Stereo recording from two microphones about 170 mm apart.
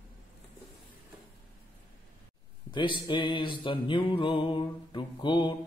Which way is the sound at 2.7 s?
25° left (ahead or behind).